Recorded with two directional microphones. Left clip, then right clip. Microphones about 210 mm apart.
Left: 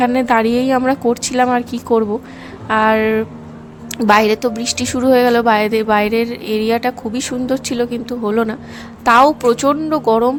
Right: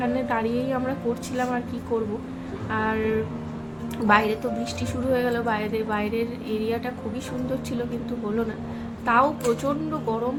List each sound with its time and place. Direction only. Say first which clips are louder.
0.0 s a woman's voice: left 11 dB; 55° left (ahead or behind)